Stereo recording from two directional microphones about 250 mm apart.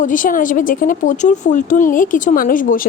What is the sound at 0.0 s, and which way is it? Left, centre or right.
A woman's voice, left.